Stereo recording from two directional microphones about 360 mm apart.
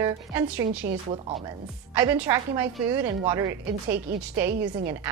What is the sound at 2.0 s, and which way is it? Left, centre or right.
A woman's voice, centre.